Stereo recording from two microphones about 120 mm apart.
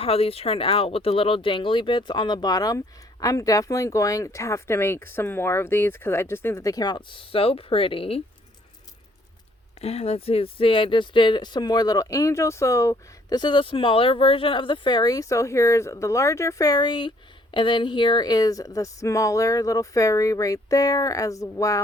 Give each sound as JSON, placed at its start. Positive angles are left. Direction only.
{"t": 0.0, "sound": "speech", "side_deg": 55}
{"t": 9.8, "sound": "speech", "side_deg": 60}